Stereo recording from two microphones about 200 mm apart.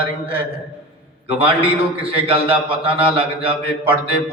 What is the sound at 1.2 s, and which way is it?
A man's voice, 25° right (ahead or behind).